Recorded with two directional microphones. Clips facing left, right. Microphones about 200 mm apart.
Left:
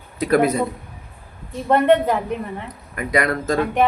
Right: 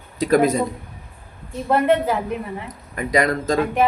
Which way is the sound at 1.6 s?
Centre (ahead or behind).